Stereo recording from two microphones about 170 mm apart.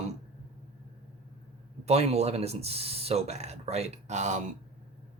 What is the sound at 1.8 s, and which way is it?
Speech, 40° right (ahead or behind).